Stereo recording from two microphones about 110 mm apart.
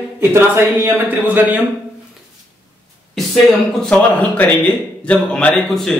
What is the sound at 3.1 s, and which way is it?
Speech, 5° left (ahead or behind).